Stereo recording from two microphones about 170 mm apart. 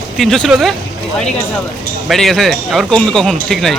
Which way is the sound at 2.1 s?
Centre (ahead or behind).